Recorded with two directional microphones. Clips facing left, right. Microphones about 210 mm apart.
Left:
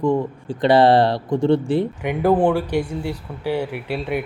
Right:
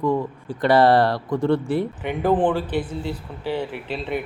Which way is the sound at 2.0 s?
10° left (ahead or behind).